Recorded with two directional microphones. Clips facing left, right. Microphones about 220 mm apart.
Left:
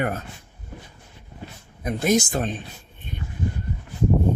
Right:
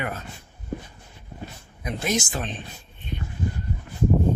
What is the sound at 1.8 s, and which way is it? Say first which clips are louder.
Speech: left 6 dB; 50° left (ahead or behind).